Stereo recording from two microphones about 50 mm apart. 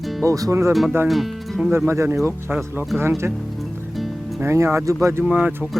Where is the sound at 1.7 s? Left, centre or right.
Right.